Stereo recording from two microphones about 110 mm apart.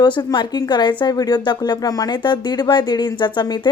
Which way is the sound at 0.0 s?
40° left (ahead or behind).